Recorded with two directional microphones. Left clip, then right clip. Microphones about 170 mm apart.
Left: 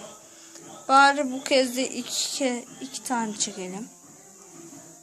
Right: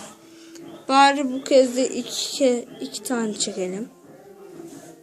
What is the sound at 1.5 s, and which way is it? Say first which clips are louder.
A woman's voice: right 7 dB; 30° left (ahead or behind).